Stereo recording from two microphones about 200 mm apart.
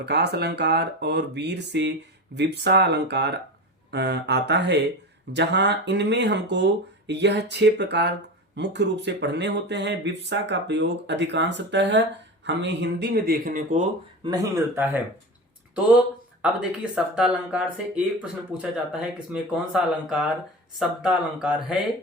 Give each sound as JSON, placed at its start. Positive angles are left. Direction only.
{"t": 0.0, "sound": "speech", "side_deg": -55}
{"t": 14.3, "sound": "speech", "side_deg": -15}